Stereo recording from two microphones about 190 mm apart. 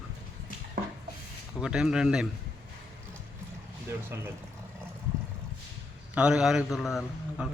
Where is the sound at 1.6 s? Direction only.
5° right (ahead or behind).